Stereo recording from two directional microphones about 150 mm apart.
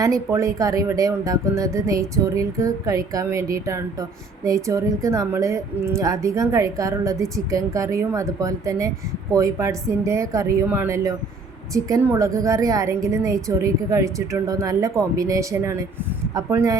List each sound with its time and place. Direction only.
0.0 s a woman's voice: 20° right (ahead or behind)
4.4 s a woman's voice: 20° right (ahead or behind)